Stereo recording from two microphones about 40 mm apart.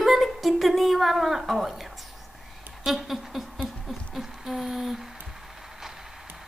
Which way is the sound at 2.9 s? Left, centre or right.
Centre.